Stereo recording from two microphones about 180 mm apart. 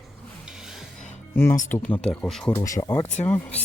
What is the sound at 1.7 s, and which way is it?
Speech, 10° left (ahead or behind).